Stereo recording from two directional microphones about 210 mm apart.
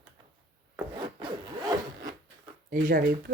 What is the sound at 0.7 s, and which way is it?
Rub, 20° right (ahead or behind).